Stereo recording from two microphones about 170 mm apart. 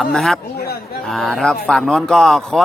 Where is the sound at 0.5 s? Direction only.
70° left (ahead or behind).